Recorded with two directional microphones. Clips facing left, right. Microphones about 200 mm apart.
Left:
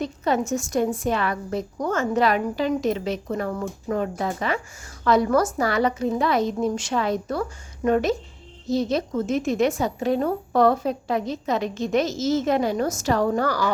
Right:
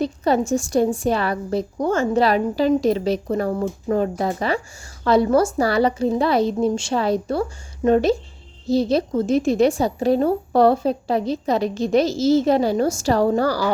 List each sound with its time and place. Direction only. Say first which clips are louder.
0.0 s a woman's voice: right 4 dB; 35° right (ahead or behind)